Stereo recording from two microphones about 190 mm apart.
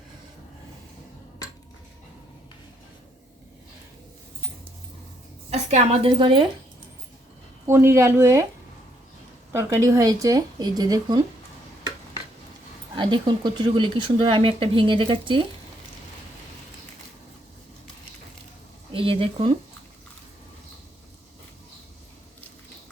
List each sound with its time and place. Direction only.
5.5 s speech: 30° right (ahead or behind)
7.7 s speech: 15° right (ahead or behind)
9.5 s speech: 15° right (ahead or behind)
13.0 s speech: 25° right (ahead or behind)
18.9 s speech: 30° right (ahead or behind)